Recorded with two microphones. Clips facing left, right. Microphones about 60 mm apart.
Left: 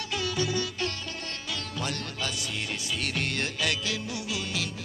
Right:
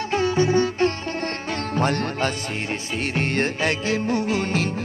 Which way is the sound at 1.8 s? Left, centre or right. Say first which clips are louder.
Right 12 dB; right.